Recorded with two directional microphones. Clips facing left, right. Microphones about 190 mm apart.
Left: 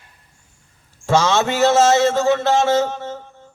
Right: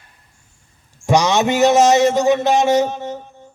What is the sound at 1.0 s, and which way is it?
A man's voice, 15° right (ahead or behind).